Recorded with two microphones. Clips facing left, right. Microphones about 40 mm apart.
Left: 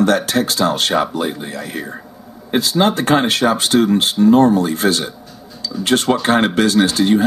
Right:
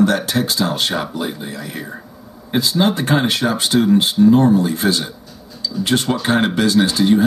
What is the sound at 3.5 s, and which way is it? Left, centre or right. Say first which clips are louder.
Speech: even; centre.